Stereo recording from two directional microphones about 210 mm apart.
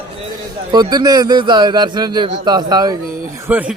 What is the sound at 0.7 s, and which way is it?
A man's voice, 20° right (ahead or behind).